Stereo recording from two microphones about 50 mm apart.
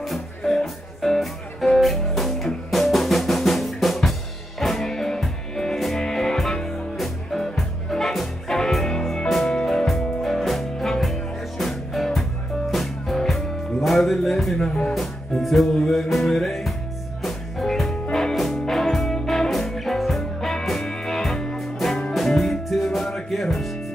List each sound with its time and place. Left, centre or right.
0.0 s music: centre
14.7 s music: left
15.0 s music: centre